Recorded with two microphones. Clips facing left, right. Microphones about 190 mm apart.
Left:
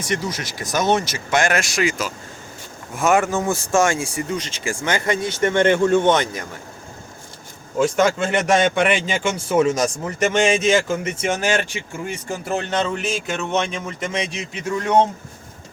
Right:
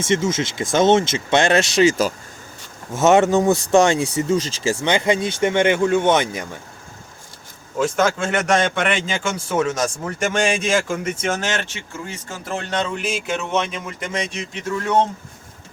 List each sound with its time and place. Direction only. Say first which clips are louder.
0.0 s speech: right 5 dB; 25° right (ahead or behind)
7.9 s a man's voice: even; centre (ahead or behind); by 12.4 s 15° left (ahead or behind)
12.5 s a man's voice: left 2 dB; 5° left (ahead or behind)
14.8 s speech: left 2 dB; 15° left (ahead or behind)